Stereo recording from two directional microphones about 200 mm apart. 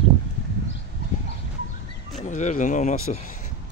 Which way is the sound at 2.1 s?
35° left (ahead or behind).